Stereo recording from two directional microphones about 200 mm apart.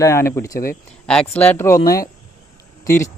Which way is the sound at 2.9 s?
40° left (ahead or behind).